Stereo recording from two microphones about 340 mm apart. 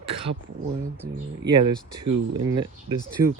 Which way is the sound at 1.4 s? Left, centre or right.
Right.